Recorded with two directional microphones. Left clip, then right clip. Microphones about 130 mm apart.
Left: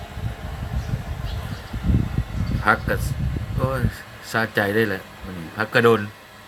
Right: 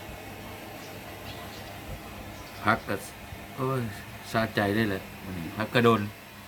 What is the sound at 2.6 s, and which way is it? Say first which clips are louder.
Speech: left 7 dB; 35° left (ahead or behind).